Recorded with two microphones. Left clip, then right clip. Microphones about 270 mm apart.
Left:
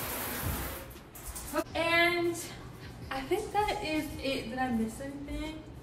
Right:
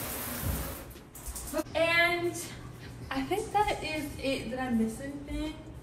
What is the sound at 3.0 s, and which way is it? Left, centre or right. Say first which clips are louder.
A woman's voice: right 1 dB; centre.